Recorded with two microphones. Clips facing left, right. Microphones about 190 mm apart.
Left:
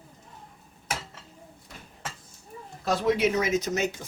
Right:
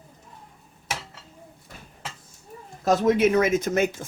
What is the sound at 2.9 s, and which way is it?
Speech, 45° right (ahead or behind).